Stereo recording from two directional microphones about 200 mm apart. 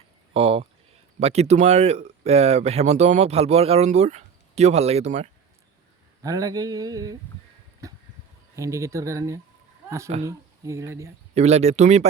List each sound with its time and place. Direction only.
0.3 s speech: 30° right (ahead or behind)
6.2 s a sound: 15° right (ahead or behind)
10.2 s speech: 15° right (ahead or behind)
11.3 s speech: 35° right (ahead or behind)